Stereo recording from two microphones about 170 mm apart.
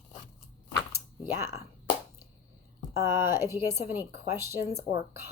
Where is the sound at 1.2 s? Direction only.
15° right (ahead or behind).